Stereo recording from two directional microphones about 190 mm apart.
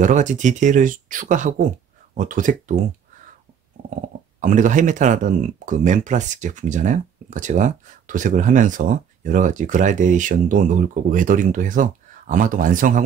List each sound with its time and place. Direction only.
0.0 s speech: 40° right (ahead or behind)
4.4 s speech: 40° right (ahead or behind)